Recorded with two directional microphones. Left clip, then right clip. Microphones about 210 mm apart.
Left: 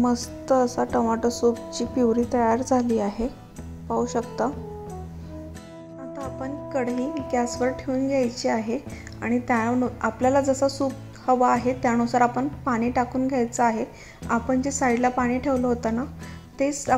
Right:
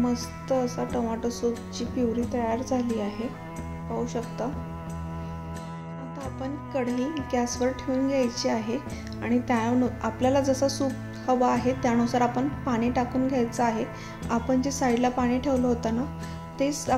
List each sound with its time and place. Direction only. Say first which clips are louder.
0.0 s a woman's voice: left 4 dB; 30° left (ahead or behind)
7.0 s a woman's voice: left 2 dB; 15° left (ahead or behind)